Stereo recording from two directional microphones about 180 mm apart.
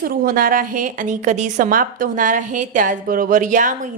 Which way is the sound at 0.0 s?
55° right (ahead or behind).